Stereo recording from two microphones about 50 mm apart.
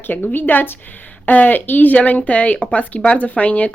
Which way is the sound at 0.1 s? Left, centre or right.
Left.